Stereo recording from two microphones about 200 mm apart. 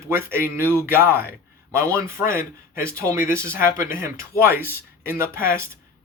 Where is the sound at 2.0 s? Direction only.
45° left (ahead or behind).